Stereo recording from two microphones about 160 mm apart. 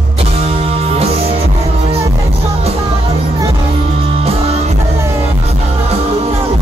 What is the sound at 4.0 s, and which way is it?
Music, 35° right (ahead or behind).